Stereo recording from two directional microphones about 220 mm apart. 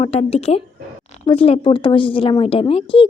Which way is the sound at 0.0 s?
25° left (ahead or behind).